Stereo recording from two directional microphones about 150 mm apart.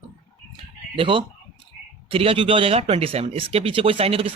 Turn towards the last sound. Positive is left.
turn(degrees=-40)  # may be behind; listen again after turning